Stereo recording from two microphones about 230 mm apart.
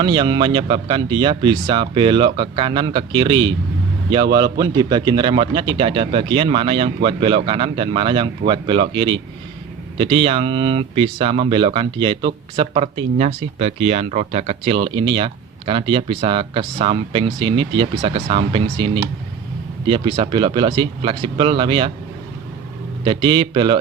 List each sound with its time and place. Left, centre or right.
0.0 s speech: centre
23.0 s speech: right